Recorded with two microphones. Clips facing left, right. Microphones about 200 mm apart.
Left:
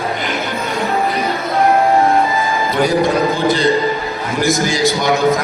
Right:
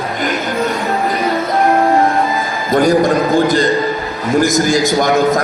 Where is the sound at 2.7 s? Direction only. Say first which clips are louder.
Right 5 dB; 45° right (ahead or behind).